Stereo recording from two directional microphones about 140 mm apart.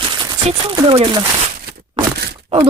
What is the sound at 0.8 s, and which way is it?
Speech, 35° right (ahead or behind).